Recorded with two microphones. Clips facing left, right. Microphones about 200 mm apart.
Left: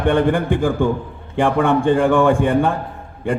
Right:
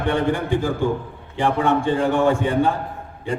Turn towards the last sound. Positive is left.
turn(degrees=55)  # may be behind; listen again after turning